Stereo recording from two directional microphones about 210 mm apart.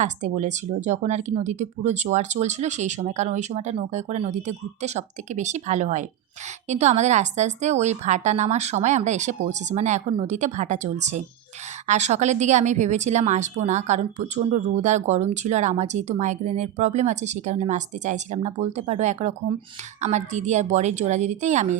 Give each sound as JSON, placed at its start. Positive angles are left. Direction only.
{"t": 0.0, "sound": "speech", "side_deg": -35}